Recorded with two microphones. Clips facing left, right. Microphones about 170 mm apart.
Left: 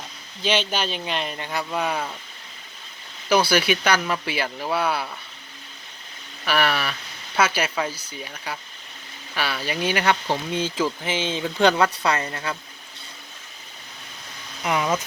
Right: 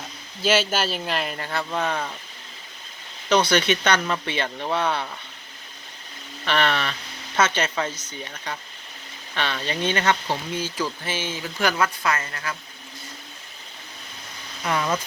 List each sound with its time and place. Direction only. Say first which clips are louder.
0.4 s speech: right 2 dB; 5° right (ahead or behind)
1.4 s speech: even; 10° left (ahead or behind)
3.2 s speech: even; 10° left (ahead or behind)
6.4 s speech: even; 5° left (ahead or behind)
14.6 s speech: left 1 dB; 15° left (ahead or behind)